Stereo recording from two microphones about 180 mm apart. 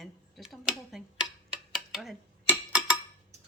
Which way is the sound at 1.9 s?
Centre (ahead or behind).